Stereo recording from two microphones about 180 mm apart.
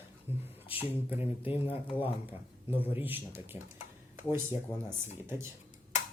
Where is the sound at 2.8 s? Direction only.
10° right (ahead or behind).